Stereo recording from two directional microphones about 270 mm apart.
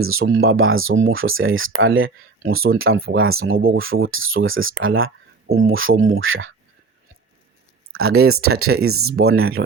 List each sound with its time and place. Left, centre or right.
0.0 s speech: right
8.3 s speech: right